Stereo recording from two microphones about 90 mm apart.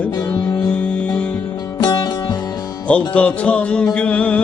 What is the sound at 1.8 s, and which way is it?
Music, 55° left (ahead or behind).